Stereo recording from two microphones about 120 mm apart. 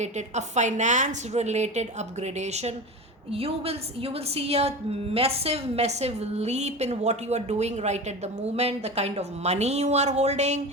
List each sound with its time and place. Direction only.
0.0 s a woman's voice: 75° right (ahead or behind)
3.3 s a woman's voice: 55° right (ahead or behind); by 10.6 s 70° right (ahead or behind)